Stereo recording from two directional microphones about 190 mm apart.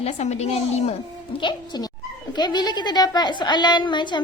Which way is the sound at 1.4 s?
25° left (ahead or behind).